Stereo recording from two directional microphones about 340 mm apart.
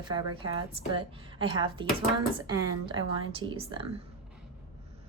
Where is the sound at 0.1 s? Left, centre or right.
Centre.